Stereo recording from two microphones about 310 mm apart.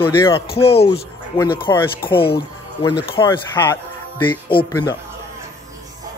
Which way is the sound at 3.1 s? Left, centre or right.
Centre.